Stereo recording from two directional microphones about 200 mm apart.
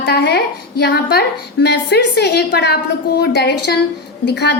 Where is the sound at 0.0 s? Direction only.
55° left (ahead or behind).